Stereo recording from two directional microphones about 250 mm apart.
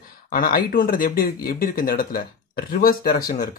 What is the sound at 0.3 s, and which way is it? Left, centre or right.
Speech, left.